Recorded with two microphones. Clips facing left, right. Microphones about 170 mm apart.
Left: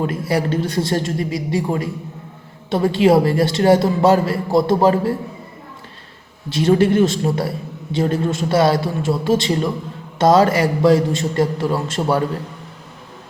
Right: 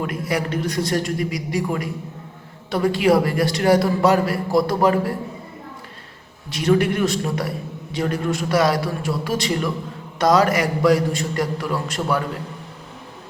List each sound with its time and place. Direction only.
0.0 s a woman's voice: 30° left (ahead or behind)
6.5 s a woman's voice: 30° left (ahead or behind)